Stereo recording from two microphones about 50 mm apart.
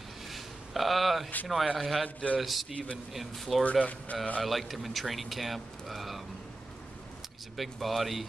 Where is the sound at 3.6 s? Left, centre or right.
Left.